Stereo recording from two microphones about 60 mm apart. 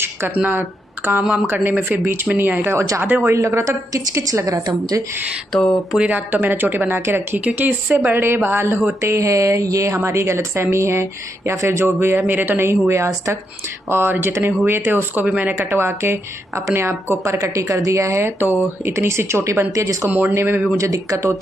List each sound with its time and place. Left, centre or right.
0.3 s speech: right
3.3 s a woman's voice: right
6.0 s speech: right
7.3 s speech: right
9.0 s speech: right
9.9 s a woman's voice: right
12.2 s a woman's voice: right
13.8 s a woman's voice: right
19.7 s a woman's voice: right
20.1 s speech: right
20.7 s speech: right